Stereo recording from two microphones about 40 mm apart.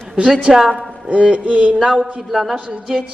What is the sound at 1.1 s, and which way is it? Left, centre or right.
Music, right.